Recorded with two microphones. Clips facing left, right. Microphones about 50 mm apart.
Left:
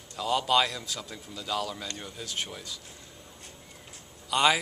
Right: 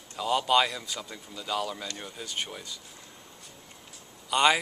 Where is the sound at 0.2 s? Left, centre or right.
Centre.